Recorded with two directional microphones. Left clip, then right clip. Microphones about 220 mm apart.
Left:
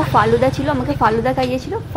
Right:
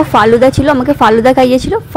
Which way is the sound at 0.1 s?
30° right (ahead or behind).